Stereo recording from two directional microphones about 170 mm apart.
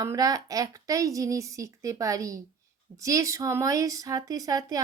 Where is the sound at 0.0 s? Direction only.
20° right (ahead or behind).